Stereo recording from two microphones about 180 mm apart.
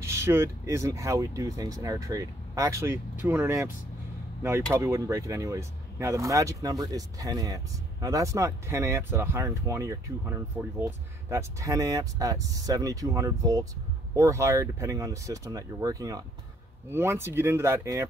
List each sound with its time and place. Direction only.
0.0 s speech: 15° right (ahead or behind)